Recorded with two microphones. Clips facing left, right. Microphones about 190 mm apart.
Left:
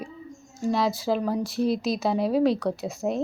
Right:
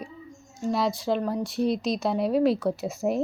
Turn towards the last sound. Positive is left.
turn(degrees=-5)  # may be behind; listen again after turning